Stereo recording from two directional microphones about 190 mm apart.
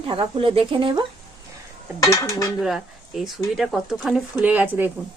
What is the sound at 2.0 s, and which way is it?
Dishes, 15° left (ahead or behind).